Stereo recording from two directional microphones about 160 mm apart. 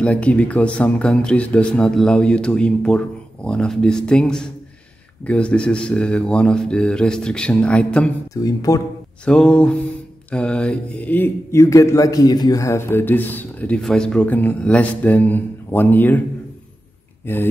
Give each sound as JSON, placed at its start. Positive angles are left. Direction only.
{"t": 0.0, "sound": "speech", "side_deg": 10}
{"t": 8.4, "sound": "speech", "side_deg": 20}
{"t": 9.2, "sound": "speech", "side_deg": 5}
{"t": 17.3, "sound": "speech", "side_deg": 10}